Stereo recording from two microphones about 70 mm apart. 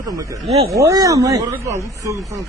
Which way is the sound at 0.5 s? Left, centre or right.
Right.